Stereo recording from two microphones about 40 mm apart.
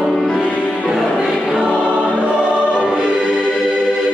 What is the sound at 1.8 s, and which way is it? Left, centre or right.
Music, right.